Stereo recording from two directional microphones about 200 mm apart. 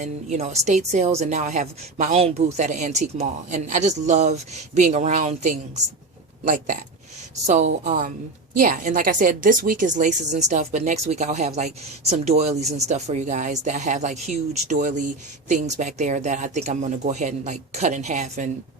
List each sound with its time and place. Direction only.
0.0 s a woman's voice: 35° right (ahead or behind)